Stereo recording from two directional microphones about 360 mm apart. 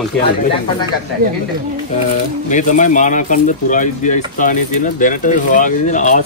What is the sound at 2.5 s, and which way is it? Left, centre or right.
Speech, left.